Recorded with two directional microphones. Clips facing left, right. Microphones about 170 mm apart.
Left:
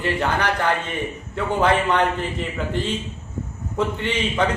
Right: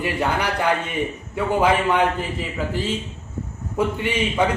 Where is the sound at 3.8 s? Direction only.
10° right (ahead or behind).